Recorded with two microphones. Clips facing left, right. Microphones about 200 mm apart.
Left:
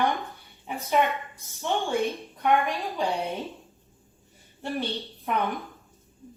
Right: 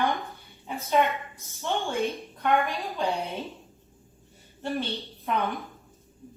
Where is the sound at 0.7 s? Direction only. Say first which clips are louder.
Left 1 dB; 15° left (ahead or behind).